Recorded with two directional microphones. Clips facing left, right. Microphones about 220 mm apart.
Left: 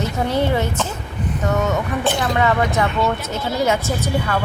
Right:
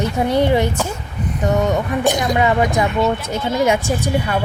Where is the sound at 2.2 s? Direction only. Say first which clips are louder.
Right 2 dB; 15° right (ahead or behind).